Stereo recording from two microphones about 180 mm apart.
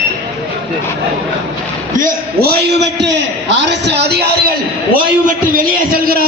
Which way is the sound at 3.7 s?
70° right (ahead or behind).